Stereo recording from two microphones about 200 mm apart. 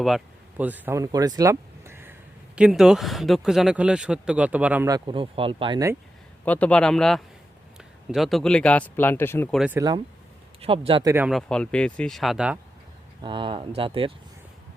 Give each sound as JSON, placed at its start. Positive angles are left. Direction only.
{"t": 0.0, "sound": "speech", "side_deg": -5}
{"t": 6.4, "sound": "speech", "side_deg": 5}
{"t": 9.6, "sound": "speech", "side_deg": -5}
{"t": 10.6, "sound": "speech", "side_deg": -25}
{"t": 11.1, "sound": "speech", "side_deg": -10}
{"t": 11.3, "sound": "speech", "side_deg": 5}
{"t": 13.2, "sound": "speech", "side_deg": -25}